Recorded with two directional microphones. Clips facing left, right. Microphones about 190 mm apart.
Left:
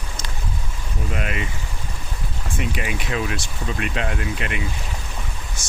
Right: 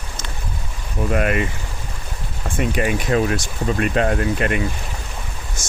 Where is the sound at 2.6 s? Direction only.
45° right (ahead or behind).